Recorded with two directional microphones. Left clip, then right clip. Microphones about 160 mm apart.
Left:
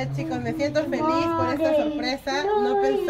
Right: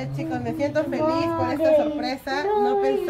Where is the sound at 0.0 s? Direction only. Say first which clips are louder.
Even; 25° left (ahead or behind).